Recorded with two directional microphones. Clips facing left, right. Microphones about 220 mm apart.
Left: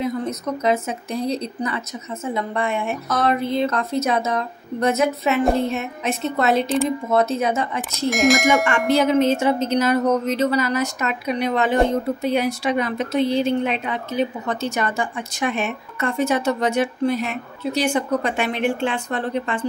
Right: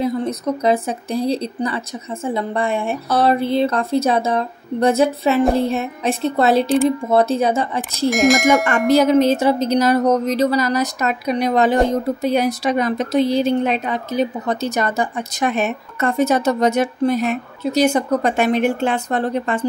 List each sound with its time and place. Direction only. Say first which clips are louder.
0.0 s speech: right 4 dB; 35° right (ahead or behind)
8.1 s speech: right 3 dB; centre (ahead or behind)
8.6 s speech: right 4 dB; 40° right (ahead or behind)